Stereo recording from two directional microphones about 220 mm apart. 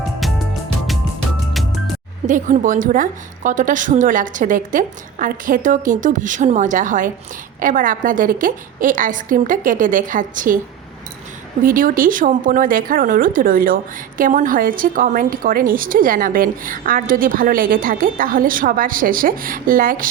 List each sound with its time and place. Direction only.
2.2 s a woman's voice: 35° right (ahead or behind)
11.6 s a woman's voice: 40° right (ahead or behind)